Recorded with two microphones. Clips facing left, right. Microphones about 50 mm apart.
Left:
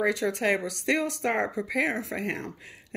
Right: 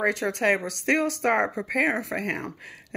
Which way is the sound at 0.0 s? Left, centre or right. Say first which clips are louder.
Right 2 dB; right.